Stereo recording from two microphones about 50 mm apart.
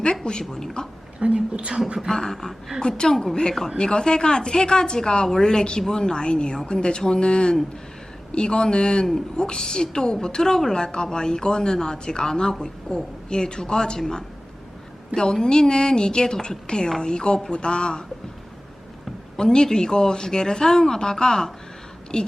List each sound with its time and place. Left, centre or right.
0.0 s a woman's voice: centre
1.2 s a woman's voice: right
2.0 s a woman's voice: centre
19.4 s a woman's voice: centre